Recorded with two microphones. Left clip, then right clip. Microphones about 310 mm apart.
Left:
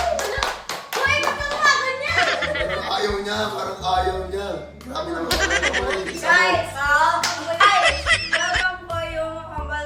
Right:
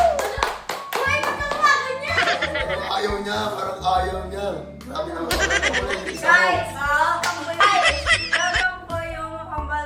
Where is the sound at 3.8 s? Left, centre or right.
Centre.